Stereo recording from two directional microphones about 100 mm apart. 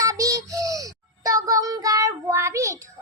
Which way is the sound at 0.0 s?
35° right (ahead or behind).